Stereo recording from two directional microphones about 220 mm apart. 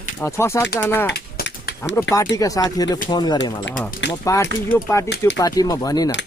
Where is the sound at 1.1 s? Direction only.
50° left (ahead or behind).